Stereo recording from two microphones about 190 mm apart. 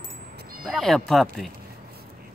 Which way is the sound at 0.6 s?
Centre (ahead or behind).